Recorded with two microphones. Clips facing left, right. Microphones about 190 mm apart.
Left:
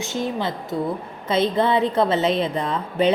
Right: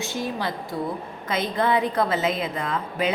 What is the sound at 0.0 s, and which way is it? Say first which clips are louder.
A woman's voice: left 3 dB; 20° left (ahead or behind).